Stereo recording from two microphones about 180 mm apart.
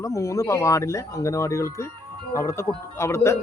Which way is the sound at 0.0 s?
15° left (ahead or behind).